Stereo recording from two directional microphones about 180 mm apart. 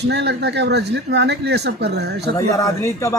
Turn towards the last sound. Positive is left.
turn(degrees=15)  # may be behind; listen again after turning